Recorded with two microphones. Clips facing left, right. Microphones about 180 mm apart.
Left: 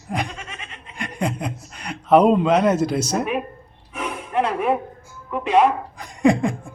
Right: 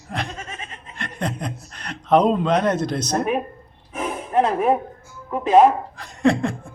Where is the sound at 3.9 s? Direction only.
45° right (ahead or behind).